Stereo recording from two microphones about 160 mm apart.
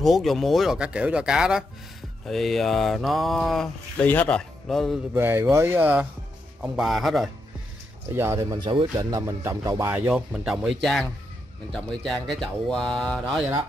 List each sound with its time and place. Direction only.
0.0 s speech: centre (ahead or behind)
5.1 s speech: 15° right (ahead or behind)
6.6 s speech: centre (ahead or behind)
8.1 s speech: 15° right (ahead or behind)
9.1 s speech: 15° right (ahead or behind); by 13.5 s centre (ahead or behind)